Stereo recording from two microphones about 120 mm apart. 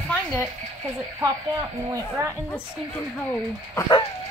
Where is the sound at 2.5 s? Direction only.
15° left (ahead or behind).